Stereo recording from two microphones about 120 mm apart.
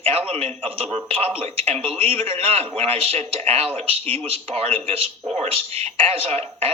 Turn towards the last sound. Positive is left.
turn(degrees=-50)  # may be behind; listen again after turning